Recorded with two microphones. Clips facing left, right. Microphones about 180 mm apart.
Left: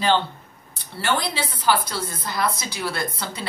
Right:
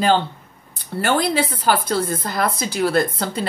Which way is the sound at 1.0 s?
50° right (ahead or behind).